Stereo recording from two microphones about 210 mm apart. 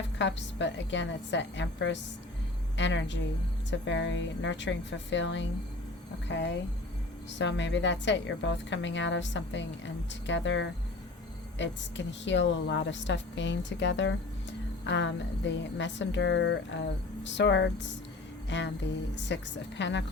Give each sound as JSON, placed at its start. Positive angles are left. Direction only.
{"t": 0.2, "sound": "a woman's voice", "side_deg": 60}